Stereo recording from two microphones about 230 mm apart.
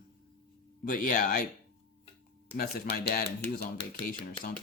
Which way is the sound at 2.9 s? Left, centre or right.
Left.